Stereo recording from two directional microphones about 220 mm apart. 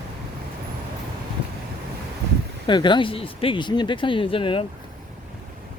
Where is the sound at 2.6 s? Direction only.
20° left (ahead or behind).